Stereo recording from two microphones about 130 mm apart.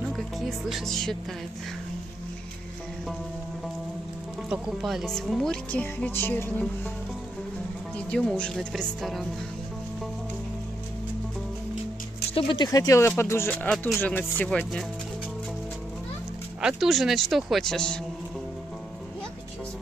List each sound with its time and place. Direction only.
0.1 s speech: centre (ahead or behind)
4.5 s speech: 5° right (ahead or behind); by 6.7 s 15° left (ahead or behind)
8.1 s speech: 5° left (ahead or behind)
12.4 s speech: 35° left (ahead or behind); by 14.9 s 5° left (ahead or behind)
16.6 s speech: centre (ahead or behind)